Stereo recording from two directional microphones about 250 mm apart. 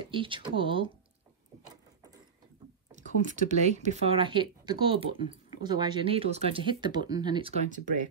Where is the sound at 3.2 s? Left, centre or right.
Right.